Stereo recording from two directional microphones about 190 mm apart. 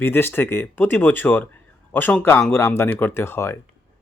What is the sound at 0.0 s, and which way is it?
Speech, 10° left (ahead or behind).